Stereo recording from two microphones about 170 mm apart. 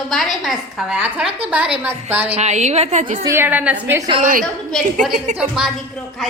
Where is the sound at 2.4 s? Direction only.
45° right (ahead or behind).